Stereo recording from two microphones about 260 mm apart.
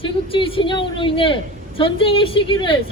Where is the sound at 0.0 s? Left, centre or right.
Centre.